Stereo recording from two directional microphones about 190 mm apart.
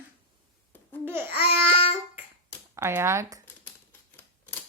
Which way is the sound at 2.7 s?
15° right (ahead or behind).